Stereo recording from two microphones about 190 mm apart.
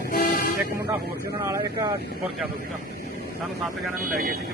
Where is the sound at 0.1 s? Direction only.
45° left (ahead or behind).